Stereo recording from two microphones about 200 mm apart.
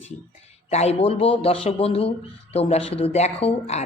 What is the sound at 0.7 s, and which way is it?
A man's voice, 30° left (ahead or behind).